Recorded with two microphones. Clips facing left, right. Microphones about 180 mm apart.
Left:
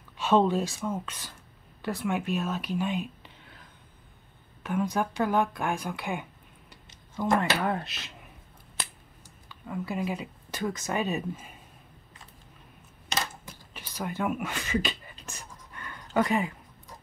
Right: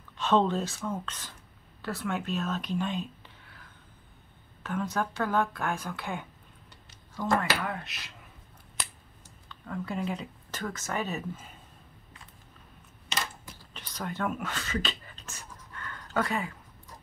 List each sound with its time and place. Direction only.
0.2 s speech: 10° left (ahead or behind)
4.6 s speech: 15° left (ahead or behind)
6.7 s a sound: 20° left (ahead or behind)
7.6 s speech: 30° left (ahead or behind)
9.5 s speech: 10° left (ahead or behind)
13.6 s a sound: 10° left (ahead or behind)